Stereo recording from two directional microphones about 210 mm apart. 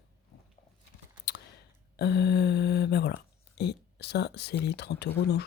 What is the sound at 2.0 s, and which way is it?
Speech, 50° left (ahead or behind).